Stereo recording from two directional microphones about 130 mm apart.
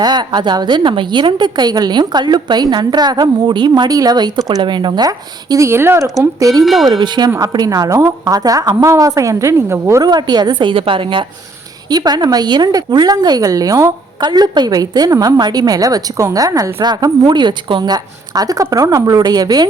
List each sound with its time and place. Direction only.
0.0 s a woman's voice: 35° right (ahead or behind)
6.6 s speech: centre (ahead or behind)
6.8 s a woman's voice: 35° right (ahead or behind)
10.0 s a woman's voice: 30° right (ahead or behind)
16.8 s a woman's voice: 35° right (ahead or behind)